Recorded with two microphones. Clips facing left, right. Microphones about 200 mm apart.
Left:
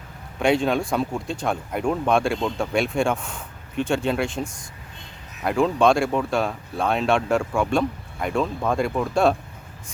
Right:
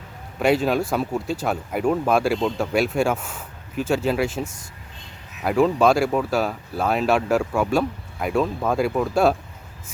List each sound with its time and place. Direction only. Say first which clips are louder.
0.3 s speech: right 1 dB; 5° right (ahead or behind)